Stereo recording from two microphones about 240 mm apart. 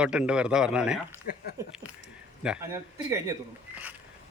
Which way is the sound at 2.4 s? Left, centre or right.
Centre.